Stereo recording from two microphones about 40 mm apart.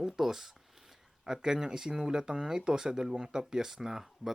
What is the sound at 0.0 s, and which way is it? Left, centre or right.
Speech, centre.